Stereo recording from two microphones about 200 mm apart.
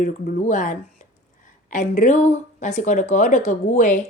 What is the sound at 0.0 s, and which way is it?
A woman's voice, 40° left (ahead or behind).